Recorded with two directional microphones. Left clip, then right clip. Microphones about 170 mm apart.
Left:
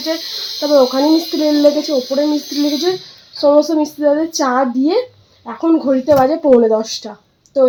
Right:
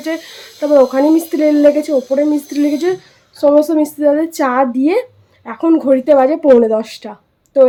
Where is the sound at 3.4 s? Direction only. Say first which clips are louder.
Right 1 dB; 35° right (ahead or behind).